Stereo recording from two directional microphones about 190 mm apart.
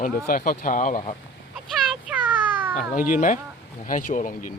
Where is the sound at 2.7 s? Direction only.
45° left (ahead or behind).